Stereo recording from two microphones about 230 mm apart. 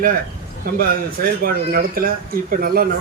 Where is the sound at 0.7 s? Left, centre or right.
Right.